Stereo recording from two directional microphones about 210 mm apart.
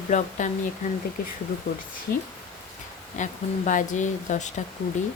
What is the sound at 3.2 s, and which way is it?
Speech, 35° left (ahead or behind).